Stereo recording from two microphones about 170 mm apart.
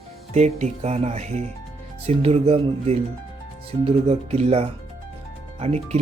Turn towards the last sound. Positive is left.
turn(degrees=-40)  # may be behind; listen again after turning